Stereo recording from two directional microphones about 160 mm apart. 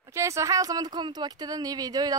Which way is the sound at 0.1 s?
20° right (ahead or behind).